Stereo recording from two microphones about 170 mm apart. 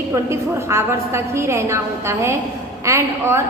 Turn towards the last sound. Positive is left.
turn(degrees=-15)  # may be behind; listen again after turning